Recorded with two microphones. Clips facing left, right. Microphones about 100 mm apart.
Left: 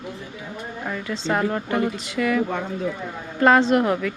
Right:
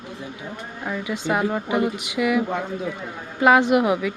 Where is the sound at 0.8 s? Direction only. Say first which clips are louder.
Right 2 dB; 10° right (ahead or behind).